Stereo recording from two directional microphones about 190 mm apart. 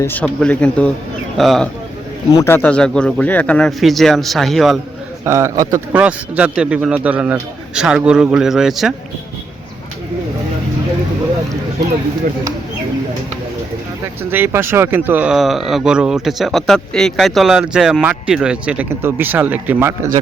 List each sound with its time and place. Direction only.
0.0 s speech: 10° left (ahead or behind)
2.3 s speech: 15° left (ahead or behind)
5.2 s a man's voice: 15° right (ahead or behind)
14.3 s speech: 10° right (ahead or behind)